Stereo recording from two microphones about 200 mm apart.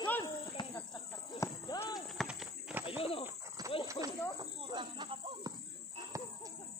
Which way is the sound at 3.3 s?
15° right (ahead or behind).